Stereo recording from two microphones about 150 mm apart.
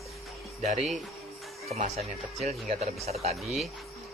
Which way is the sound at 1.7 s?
45° right (ahead or behind).